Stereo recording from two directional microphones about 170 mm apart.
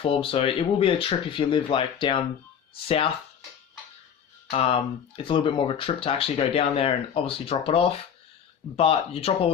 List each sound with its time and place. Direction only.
0.0 s speech: 30° left (ahead or behind)
4.5 s speech: 35° left (ahead or behind)